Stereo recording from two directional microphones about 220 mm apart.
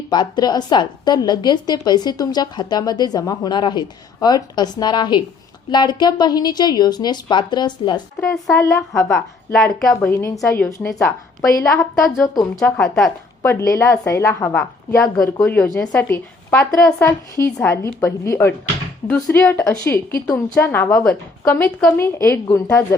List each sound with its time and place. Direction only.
0.1 s a woman's voice: 20° left (ahead or behind)
8.3 s a woman's voice: centre (ahead or behind)
12.2 s a woman's voice: 15° left (ahead or behind)
12.5 s a woman's voice: 5° left (ahead or behind)